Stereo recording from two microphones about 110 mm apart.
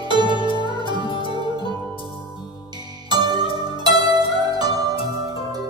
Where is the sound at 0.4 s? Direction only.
45° left (ahead or behind).